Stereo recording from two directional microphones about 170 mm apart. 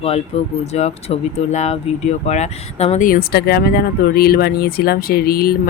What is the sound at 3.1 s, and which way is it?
Speech, 65° left (ahead or behind).